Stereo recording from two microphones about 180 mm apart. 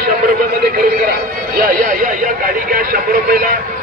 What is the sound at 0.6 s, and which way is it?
A man's voice, 60° right (ahead or behind).